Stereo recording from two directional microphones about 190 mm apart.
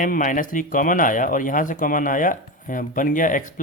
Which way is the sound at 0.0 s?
45° left (ahead or behind).